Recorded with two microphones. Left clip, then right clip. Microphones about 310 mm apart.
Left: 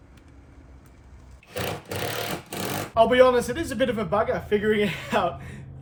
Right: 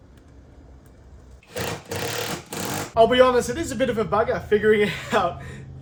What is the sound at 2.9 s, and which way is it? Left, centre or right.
A man's voice, centre.